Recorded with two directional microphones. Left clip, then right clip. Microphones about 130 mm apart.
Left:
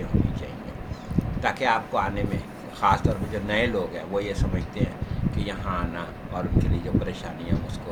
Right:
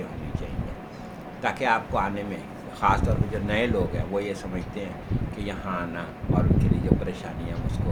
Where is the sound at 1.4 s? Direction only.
15° right (ahead or behind).